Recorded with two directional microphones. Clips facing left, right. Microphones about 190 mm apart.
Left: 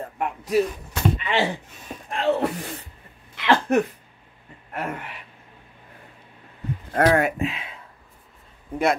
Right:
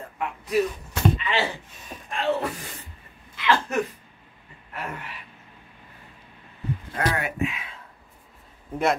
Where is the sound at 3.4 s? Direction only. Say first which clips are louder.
Left 4 dB; 55° left (ahead or behind).